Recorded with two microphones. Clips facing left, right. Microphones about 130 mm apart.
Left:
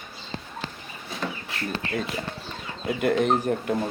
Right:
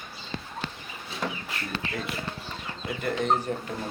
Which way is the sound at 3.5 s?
45° left (ahead or behind).